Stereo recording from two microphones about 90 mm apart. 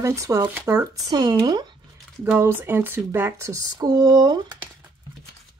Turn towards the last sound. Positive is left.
turn(degrees=-45)  # may be behind; listen again after turning